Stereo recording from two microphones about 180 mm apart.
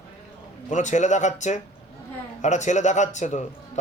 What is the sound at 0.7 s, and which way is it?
A man's voice, 40° left (ahead or behind).